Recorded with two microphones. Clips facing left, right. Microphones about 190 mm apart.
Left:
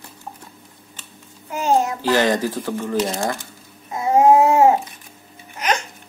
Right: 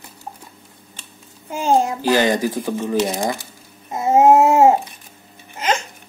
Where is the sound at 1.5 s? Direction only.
30° right (ahead or behind).